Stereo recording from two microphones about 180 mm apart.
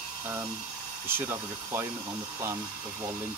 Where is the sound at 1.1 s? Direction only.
10° right (ahead or behind).